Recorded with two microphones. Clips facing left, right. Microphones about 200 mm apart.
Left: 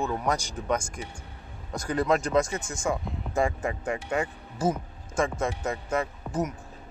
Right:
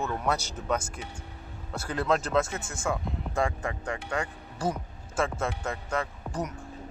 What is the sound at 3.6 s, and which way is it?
Speech, 20° left (ahead or behind).